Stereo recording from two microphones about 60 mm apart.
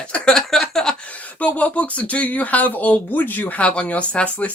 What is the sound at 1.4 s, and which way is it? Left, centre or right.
Speech, left.